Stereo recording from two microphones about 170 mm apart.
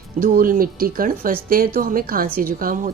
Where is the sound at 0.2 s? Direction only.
55° right (ahead or behind).